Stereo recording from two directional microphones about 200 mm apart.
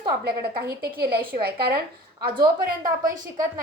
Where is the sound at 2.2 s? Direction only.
45° right (ahead or behind).